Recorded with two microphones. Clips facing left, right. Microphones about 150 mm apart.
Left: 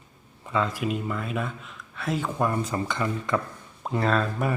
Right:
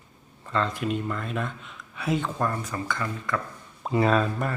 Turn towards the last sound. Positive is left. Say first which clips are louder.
# right 2 dB
turn(degrees=-5)  # may be behind; listen again after turning